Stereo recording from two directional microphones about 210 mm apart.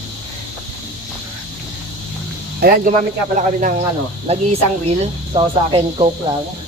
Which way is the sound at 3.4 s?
40° right (ahead or behind).